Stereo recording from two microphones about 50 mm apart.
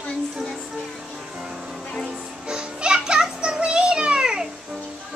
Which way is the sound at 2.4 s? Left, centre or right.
Centre.